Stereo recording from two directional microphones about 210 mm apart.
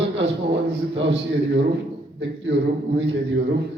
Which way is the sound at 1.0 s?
60° right (ahead or behind).